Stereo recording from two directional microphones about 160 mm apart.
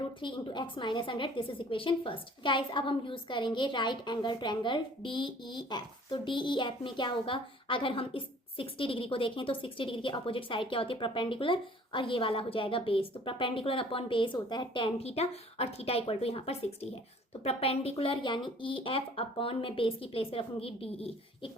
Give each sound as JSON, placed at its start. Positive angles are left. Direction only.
{"t": 0.2, "sound": "a woman's voice", "side_deg": 30}